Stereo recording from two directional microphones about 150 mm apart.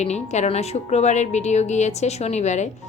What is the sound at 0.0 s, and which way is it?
Speech, 50° left (ahead or behind).